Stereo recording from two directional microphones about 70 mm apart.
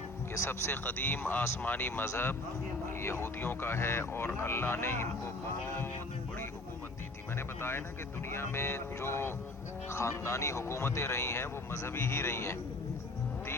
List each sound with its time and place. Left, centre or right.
0.3 s speech: left
0.9 s speech: left
8.3 s speech: left